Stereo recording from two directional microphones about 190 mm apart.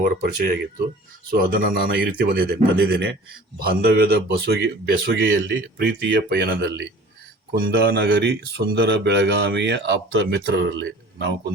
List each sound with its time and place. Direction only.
0.0 s speech: 55° right (ahead or behind)